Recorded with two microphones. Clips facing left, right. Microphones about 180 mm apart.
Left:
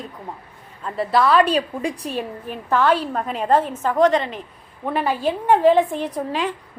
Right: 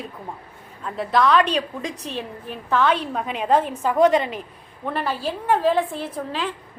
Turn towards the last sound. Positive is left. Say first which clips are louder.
# left 4 dB
turn(degrees=15)  # may be behind; listen again after turning